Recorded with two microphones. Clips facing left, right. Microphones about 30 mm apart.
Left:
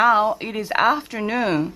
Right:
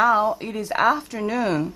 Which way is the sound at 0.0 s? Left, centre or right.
Left.